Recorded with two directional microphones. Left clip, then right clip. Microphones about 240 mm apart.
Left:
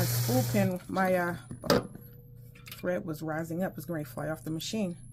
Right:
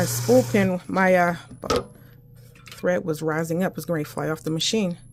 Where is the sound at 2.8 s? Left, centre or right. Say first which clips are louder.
Right 10 dB; right.